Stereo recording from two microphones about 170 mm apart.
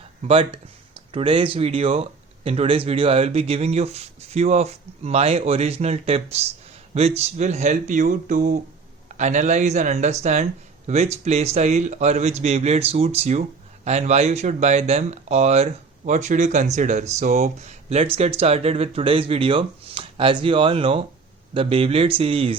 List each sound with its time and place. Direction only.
0.3 s speech: 35° right (ahead or behind)